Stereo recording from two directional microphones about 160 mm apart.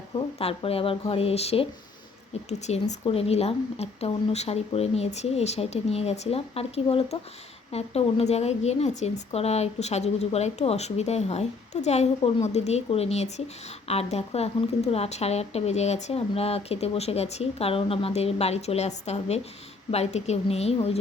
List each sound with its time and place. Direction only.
0.2 s a woman's voice: 35° left (ahead or behind)